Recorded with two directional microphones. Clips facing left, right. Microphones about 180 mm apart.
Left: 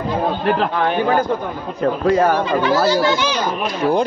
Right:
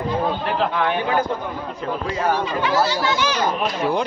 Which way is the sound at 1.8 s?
50° left (ahead or behind).